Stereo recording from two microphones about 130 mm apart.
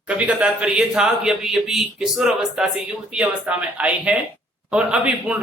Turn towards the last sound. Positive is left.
turn(degrees=-10)  # may be behind; listen again after turning